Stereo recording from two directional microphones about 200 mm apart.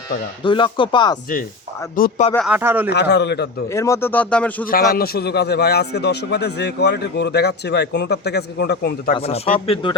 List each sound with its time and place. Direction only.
0.4 s speech: 25° left (ahead or behind)
2.0 s speech: 45° left (ahead or behind)
2.5 s speech: 10° right (ahead or behind)
2.9 s a man's voice: 55° left (ahead or behind)
3.7 s a man's voice: 15° left (ahead or behind)
4.6 s a man's voice: 45° left (ahead or behind)
9.1 s speech: 30° left (ahead or behind)